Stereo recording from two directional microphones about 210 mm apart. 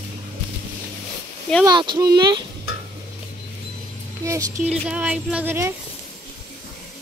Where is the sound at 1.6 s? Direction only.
20° right (ahead or behind).